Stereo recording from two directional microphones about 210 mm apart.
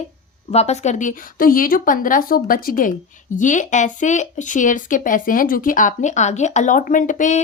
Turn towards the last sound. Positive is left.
turn(degrees=35)  # may be behind; listen again after turning